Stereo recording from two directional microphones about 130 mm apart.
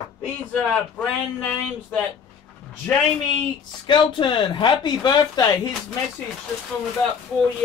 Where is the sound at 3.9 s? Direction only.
40° left (ahead or behind).